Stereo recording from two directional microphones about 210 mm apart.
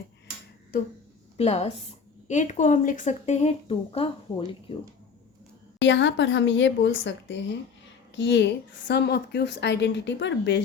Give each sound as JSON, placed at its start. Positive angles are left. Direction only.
{"t": 0.7, "sound": "speech", "side_deg": 40}
{"t": 1.4, "sound": "speech", "side_deg": 30}
{"t": 5.8, "sound": "a woman's voice", "side_deg": 60}